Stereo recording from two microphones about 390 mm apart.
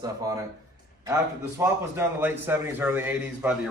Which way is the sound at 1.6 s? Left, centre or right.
Centre.